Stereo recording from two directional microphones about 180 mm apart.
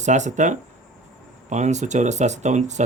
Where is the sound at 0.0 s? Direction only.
40° right (ahead or behind).